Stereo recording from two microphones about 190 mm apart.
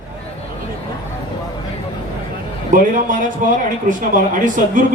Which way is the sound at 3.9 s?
45° right (ahead or behind).